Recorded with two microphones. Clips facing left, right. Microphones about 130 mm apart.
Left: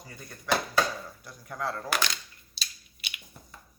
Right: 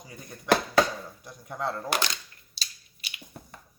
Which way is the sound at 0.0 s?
15° right (ahead or behind).